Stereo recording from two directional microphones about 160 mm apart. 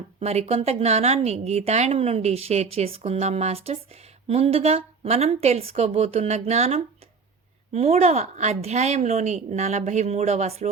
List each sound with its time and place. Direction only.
0.2 s a woman's voice: 40° right (ahead or behind)